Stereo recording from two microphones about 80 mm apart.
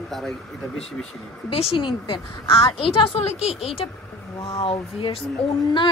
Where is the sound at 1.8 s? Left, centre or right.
Left.